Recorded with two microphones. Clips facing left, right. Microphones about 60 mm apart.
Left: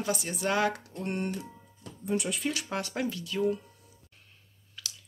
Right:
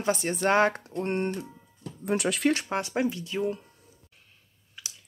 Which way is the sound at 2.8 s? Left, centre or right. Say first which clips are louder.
Right 5 dB; right.